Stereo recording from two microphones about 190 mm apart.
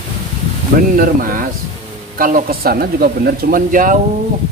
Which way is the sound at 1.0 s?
45° right (ahead or behind).